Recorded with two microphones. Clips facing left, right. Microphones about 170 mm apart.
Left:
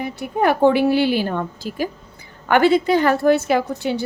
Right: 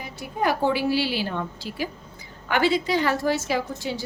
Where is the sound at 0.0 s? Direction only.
60° left (ahead or behind).